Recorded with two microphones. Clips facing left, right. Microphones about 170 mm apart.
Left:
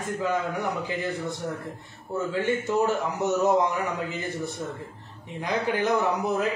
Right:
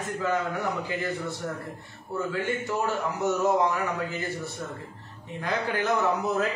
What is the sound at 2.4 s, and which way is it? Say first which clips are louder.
Speech: left 4 dB; 20° left (ahead or behind).